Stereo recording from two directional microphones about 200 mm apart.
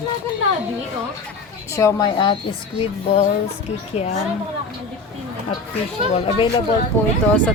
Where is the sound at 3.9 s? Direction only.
30° left (ahead or behind).